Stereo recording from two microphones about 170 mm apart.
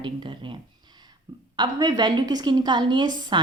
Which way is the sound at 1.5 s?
25° right (ahead or behind).